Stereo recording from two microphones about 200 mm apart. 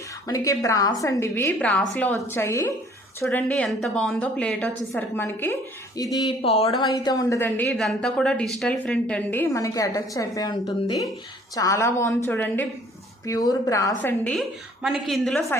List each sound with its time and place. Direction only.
0.3 s a woman's voice: 15° left (ahead or behind); by 15.4 s centre (ahead or behind)